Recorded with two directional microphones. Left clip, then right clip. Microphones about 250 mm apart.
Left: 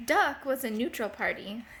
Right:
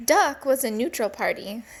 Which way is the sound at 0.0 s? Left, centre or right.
Right.